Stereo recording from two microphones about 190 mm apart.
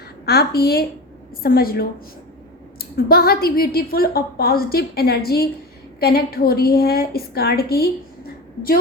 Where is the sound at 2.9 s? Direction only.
55° left (ahead or behind).